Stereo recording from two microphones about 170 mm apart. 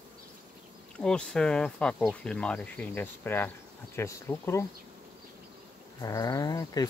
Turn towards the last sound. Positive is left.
turn(degrees=20)  # may be behind; listen again after turning